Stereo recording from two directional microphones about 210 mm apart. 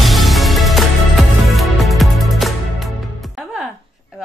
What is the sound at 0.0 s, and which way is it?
Music, centre (ahead or behind).